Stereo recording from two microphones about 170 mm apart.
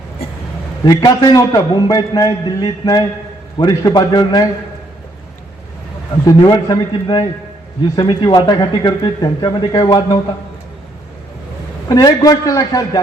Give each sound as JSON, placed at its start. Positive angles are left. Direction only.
{"t": 0.9, "sound": "speech", "side_deg": 20}
{"t": 6.2, "sound": "speech", "side_deg": 25}
{"t": 11.9, "sound": "speech", "side_deg": 20}